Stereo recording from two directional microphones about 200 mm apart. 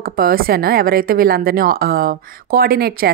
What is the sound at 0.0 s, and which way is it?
A woman's voice, 45° right (ahead or behind).